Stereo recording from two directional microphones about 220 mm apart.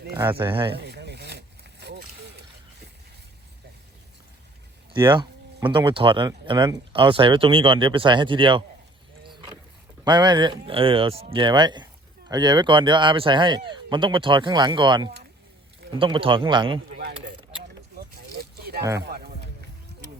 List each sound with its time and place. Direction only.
0.3 s speech: 20° right (ahead or behind)
0.8 s boat: 50° right (ahead or behind)
4.9 s speech: 20° right (ahead or behind)
10.0 s speech: 20° right (ahead or behind)
17.0 s speech: 45° right (ahead or behind)
18.1 s vehicle: 45° right (ahead or behind)
18.8 s speech: 15° right (ahead or behind)
19.0 s a sound: 50° right (ahead or behind)